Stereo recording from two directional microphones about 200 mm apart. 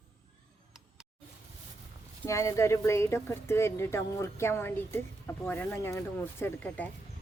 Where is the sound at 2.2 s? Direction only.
15° left (ahead or behind).